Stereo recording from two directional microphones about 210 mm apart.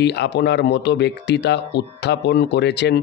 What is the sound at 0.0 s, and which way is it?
Speech, 55° left (ahead or behind).